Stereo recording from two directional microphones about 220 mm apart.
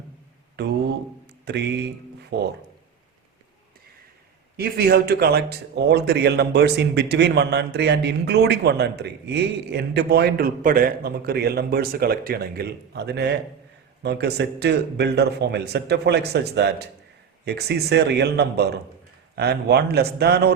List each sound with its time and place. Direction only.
0.6 s speech: 50° right (ahead or behind)
4.5 s speech: 45° right (ahead or behind)